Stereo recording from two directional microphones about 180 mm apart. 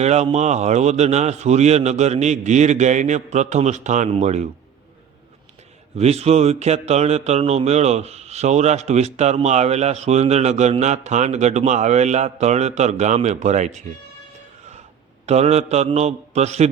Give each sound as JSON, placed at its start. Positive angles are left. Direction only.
{"t": 0.0, "sound": "speech", "side_deg": -40}
{"t": 6.0, "sound": "speech", "side_deg": -35}
{"t": 15.3, "sound": "speech", "side_deg": -35}